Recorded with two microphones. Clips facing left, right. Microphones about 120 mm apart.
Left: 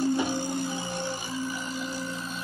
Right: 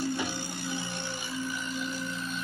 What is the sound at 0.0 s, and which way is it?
Music, 40° left (ahead or behind).